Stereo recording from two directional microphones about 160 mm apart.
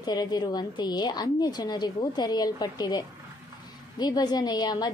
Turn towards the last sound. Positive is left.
turn(degrees=25)  # may be behind; listen again after turning